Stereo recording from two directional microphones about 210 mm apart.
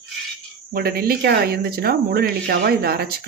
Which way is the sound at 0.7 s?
45° right (ahead or behind).